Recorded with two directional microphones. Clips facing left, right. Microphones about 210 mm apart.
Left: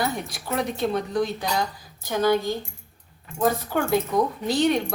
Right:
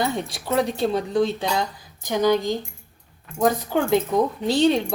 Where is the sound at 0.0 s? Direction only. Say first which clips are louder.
Right 3 dB; 25° right (ahead or behind).